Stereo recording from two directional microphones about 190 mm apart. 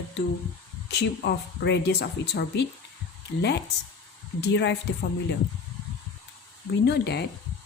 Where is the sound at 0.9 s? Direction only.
60° left (ahead or behind).